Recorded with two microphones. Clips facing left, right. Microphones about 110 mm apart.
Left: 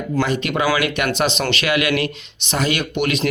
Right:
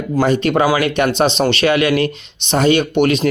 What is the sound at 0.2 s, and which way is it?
Speech, 35° right (ahead or behind).